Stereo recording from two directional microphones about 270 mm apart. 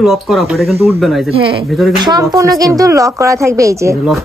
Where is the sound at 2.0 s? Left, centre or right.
Centre.